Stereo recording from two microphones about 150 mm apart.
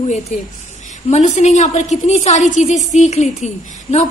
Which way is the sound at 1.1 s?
50° left (ahead or behind).